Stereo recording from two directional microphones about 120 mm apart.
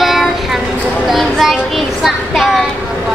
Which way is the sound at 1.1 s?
Centre (ahead or behind).